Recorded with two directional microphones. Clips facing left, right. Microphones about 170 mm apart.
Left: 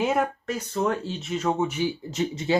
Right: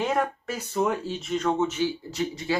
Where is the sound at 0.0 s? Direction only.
5° left (ahead or behind).